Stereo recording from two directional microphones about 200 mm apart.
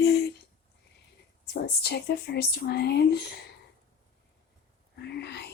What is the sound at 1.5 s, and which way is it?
Speech, 55° left (ahead or behind).